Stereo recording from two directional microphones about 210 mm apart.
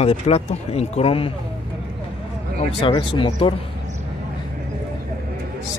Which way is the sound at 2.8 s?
25° left (ahead or behind).